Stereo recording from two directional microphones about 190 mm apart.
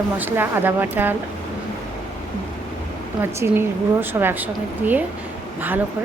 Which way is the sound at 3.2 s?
10° right (ahead or behind).